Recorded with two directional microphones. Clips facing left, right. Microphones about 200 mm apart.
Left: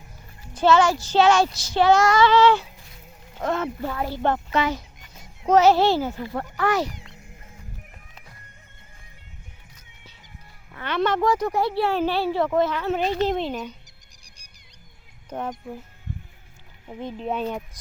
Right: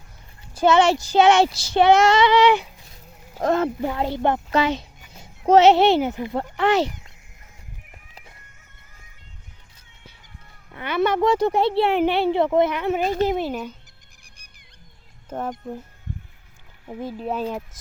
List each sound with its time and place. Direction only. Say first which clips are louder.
0.5 s speech: right 1 dB; 15° right (ahead or behind)
3.3 s speech: right 5 dB; 40° right (ahead or behind)
3.8 s speech: right 4 dB; 20° right (ahead or behind)
4.5 s speech: right 3 dB; 30° right (ahead or behind)
10.8 s speech: right 2 dB; 10° right (ahead or behind)
11.2 s speech: right 3 dB; 25° right (ahead or behind); by 13.7 s 5° right (ahead or behind)
14.3 s music: even; 55° right (ahead or behind)
15.3 s speech: right 2 dB; 5° right (ahead or behind)
16.8 s speech: right 2 dB; 10° right (ahead or behind)